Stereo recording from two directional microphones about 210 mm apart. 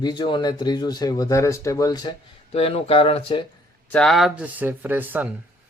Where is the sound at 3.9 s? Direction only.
Centre (ahead or behind).